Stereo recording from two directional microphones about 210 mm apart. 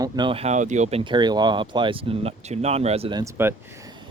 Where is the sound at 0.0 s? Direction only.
25° right (ahead or behind).